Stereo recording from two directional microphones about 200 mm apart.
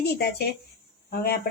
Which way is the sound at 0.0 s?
55° left (ahead or behind).